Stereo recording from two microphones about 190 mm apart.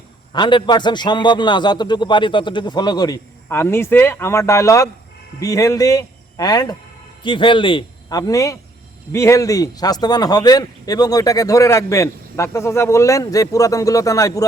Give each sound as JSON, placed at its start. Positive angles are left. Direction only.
{"t": 0.3, "sound": "a man's voice", "side_deg": 25}